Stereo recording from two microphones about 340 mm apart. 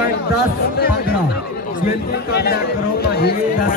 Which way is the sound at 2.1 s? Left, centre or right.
Left.